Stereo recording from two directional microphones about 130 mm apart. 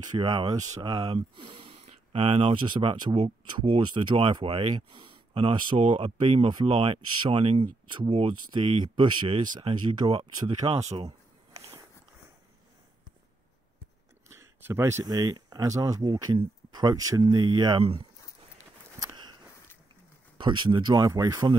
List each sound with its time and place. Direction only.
0.0 s speech: 35° right (ahead or behind)
1.1 s speech: 40° right (ahead or behind)
14.3 s speech: 20° right (ahead or behind); by 17.8 s 35° right (ahead or behind)
18.9 s a sound: 35° right (ahead or behind)
20.3 s speech: 40° right (ahead or behind)